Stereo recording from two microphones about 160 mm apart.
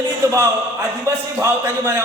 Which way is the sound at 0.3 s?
15° right (ahead or behind).